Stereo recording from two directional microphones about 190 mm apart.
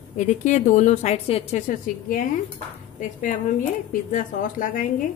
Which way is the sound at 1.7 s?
45° left (ahead or behind).